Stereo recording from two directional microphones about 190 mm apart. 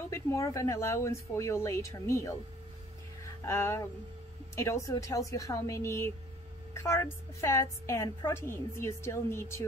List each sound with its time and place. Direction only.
0.1 s a woman's voice: 15° left (ahead or behind)
3.4 s a woman's voice: 15° left (ahead or behind)